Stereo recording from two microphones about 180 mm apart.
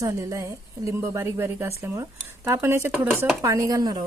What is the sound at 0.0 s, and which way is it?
A woman's voice, 15° right (ahead or behind).